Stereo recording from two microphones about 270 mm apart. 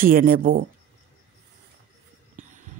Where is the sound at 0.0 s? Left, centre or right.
Right.